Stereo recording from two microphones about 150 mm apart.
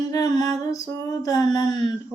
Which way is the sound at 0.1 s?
25° left (ahead or behind).